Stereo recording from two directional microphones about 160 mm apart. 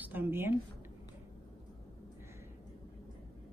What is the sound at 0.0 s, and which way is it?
Speech, 10° right (ahead or behind).